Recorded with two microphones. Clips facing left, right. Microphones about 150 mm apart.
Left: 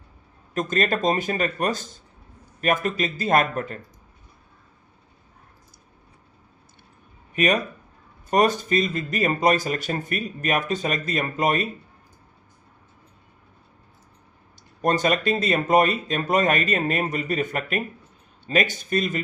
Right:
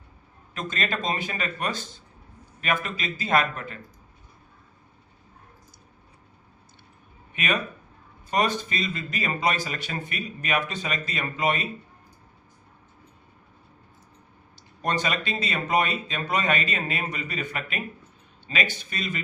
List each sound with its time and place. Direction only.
0.5 s speech: 45° left (ahead or behind)
7.3 s speech: 40° left (ahead or behind)
14.8 s speech: 45° left (ahead or behind)